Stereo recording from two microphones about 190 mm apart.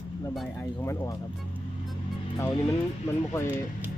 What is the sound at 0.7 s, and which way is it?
Speech, 15° left (ahead or behind).